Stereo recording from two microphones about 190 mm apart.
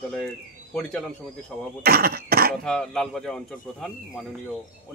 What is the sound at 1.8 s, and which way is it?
Speech, 55° right (ahead or behind).